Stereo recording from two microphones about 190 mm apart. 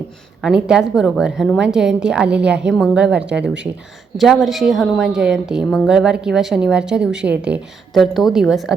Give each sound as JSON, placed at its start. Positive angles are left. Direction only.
{"t": 0.4, "sound": "a woman's voice", "side_deg": -5}